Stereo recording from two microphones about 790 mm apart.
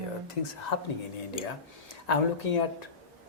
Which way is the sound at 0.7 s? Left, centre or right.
Left.